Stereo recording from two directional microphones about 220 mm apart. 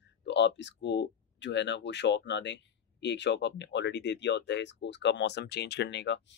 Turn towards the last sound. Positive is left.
turn(degrees=55)  # may be behind; listen again after turning